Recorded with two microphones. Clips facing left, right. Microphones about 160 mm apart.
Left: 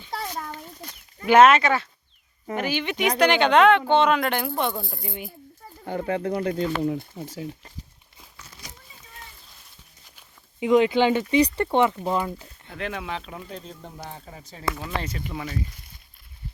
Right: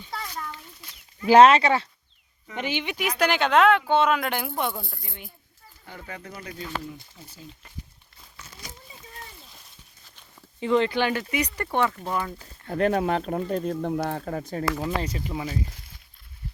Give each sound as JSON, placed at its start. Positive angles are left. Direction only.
{"t": 0.1, "sound": "a sound", "side_deg": 35}
{"t": 1.2, "sound": "speech", "side_deg": -30}
{"t": 2.9, "sound": "speech", "side_deg": -5}
{"t": 5.0, "sound": "speech", "side_deg": 15}
{"t": 5.8, "sound": "speech", "side_deg": 50}
{"t": 10.6, "sound": "speech", "side_deg": 15}
{"t": 12.6, "sound": "speech", "side_deg": -45}
{"t": 14.8, "sound": "speech", "side_deg": -30}